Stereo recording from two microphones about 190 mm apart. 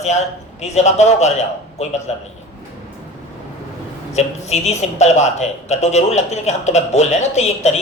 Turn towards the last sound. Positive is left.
turn(degrees=35)  # may be behind; listen again after turning